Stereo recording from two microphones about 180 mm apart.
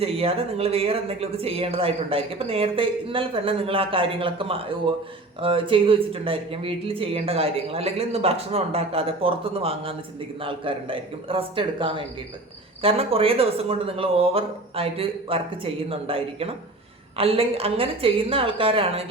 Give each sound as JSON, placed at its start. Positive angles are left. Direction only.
{"t": 0.0, "sound": "a man's voice", "side_deg": -35}